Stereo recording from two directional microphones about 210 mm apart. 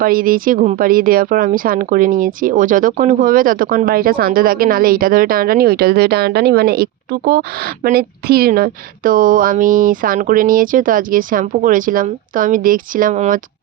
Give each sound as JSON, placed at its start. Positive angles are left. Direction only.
{"t": 0.0, "sound": "speech", "side_deg": -45}